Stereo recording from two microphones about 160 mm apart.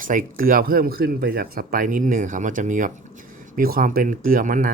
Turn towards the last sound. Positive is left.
turn(degrees=-55)  # may be behind; listen again after turning